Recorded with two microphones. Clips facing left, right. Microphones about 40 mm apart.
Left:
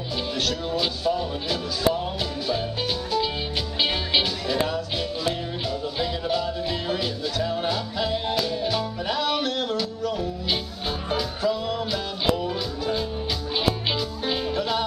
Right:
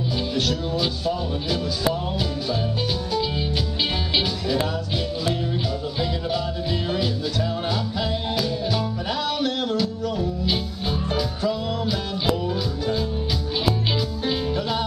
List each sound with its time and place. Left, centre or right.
0.4 s a man's voice: centre
5.9 s music: centre
14.2 s music: centre